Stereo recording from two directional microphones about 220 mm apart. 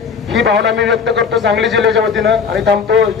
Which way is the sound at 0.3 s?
55° right (ahead or behind).